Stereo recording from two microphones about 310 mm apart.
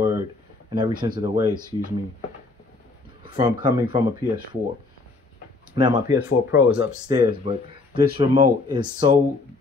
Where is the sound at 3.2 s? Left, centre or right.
Centre.